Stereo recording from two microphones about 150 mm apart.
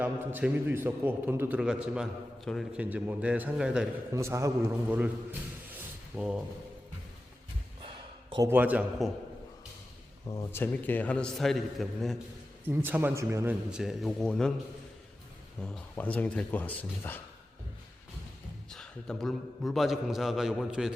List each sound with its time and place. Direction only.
0.0 s a man's voice: 10° right (ahead or behind)
2.7 s a man's voice: 10° right (ahead or behind)
4.1 s a man's voice: 20° right (ahead or behind)
6.1 s a man's voice: 5° right (ahead or behind)
8.4 s a man's voice: 10° right (ahead or behind)
10.2 s a man's voice: 20° left (ahead or behind); by 12.1 s centre (ahead or behind)
12.6 s a man's voice: 15° right (ahead or behind)
13.7 s a man's voice: 5° right (ahead or behind)
15.6 s a man's voice: 5° left (ahead or behind)
18.7 s a man's voice: 5° left (ahead or behind)